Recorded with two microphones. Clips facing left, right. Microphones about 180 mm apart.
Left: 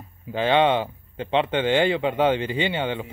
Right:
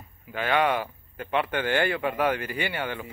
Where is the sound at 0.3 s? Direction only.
25° left (ahead or behind).